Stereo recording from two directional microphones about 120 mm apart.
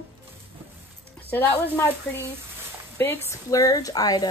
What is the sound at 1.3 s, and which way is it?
Speech, 15° left (ahead or behind).